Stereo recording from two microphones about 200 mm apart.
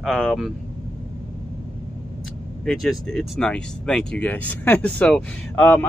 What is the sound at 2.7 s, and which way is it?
Speech, centre (ahead or behind).